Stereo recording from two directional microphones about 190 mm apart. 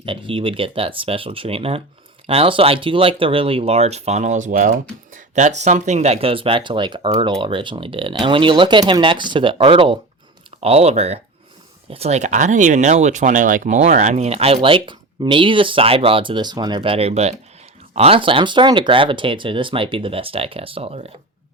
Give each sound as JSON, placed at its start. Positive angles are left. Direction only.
{"t": 0.0, "sound": "speech", "side_deg": -25}